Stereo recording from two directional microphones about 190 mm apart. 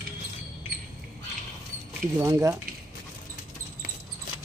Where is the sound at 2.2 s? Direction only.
15° right (ahead or behind).